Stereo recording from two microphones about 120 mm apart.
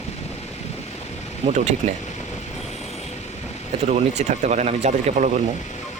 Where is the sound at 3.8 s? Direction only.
70° right (ahead or behind).